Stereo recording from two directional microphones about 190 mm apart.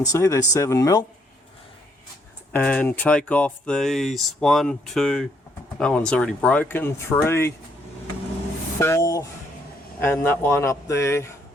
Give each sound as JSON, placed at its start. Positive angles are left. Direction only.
{"t": 0.0, "sound": "speech", "side_deg": 15}
{"t": 2.5, "sound": "speech", "side_deg": 5}
{"t": 8.8, "sound": "speech", "side_deg": 15}